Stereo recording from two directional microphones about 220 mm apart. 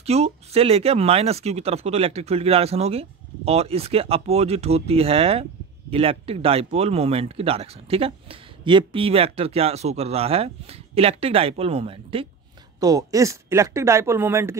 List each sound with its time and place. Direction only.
0.0 s speech: 30° right (ahead or behind); by 14.6 s 10° right (ahead or behind)